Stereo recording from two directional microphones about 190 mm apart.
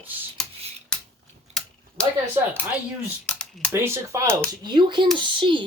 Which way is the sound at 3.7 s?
15° right (ahead or behind).